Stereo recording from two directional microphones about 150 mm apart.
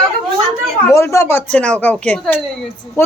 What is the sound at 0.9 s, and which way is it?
A woman's voice, 20° left (ahead or behind).